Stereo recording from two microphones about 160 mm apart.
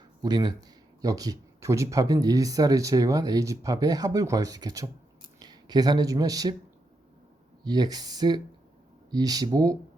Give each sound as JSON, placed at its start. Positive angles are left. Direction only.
{"t": 0.2, "sound": "speech", "side_deg": -25}
{"t": 7.6, "sound": "speech", "side_deg": -25}